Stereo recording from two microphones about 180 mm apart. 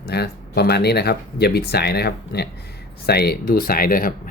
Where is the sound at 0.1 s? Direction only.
65° left (ahead or behind).